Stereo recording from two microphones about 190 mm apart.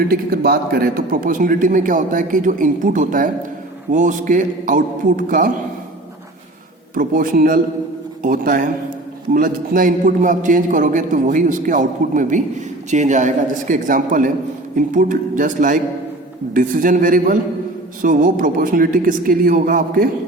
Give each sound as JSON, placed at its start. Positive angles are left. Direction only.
{"t": 0.1, "sound": "a man's voice", "side_deg": -50}
{"t": 6.9, "sound": "a man's voice", "side_deg": -45}